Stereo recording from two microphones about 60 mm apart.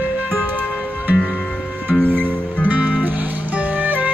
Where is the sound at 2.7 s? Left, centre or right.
Right.